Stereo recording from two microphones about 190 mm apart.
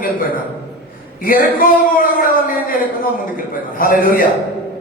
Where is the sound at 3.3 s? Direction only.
45° left (ahead or behind).